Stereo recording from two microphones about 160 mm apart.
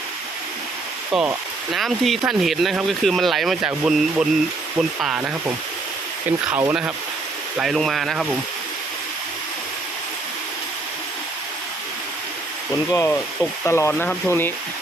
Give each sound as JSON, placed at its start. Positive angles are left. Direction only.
{"t": 1.1, "sound": "speech", "side_deg": -5}
{"t": 6.5, "sound": "speech", "side_deg": -10}
{"t": 7.6, "sound": "speech", "side_deg": 0}
{"t": 12.9, "sound": "speech", "side_deg": 20}